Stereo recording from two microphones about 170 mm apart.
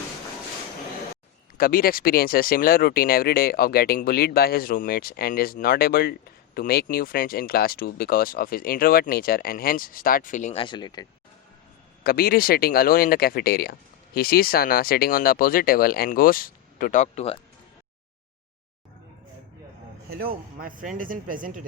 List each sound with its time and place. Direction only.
1.5 s speech: 60° left (ahead or behind)
10.6 s speech: 25° left (ahead or behind)
12.0 s speech: 60° left (ahead or behind); by 17.3 s 45° left (ahead or behind)
20.1 s speech: 60° right (ahead or behind)